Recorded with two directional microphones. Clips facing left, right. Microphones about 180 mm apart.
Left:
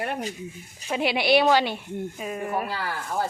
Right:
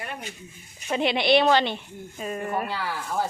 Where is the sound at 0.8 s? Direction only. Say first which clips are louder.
Right 1 dB; 5° left (ahead or behind).